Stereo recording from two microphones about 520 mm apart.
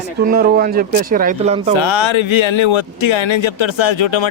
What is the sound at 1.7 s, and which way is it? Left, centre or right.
Speech, left.